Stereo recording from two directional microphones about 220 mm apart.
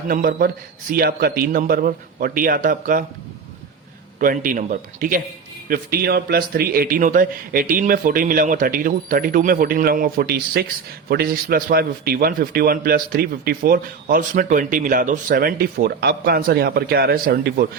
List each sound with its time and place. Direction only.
0.1 s a man's voice: 40° right (ahead or behind)
4.2 s a man's voice: 40° right (ahead or behind)